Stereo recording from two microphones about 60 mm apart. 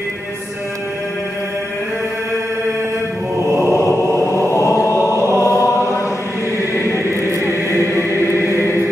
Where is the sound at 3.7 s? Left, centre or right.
Left.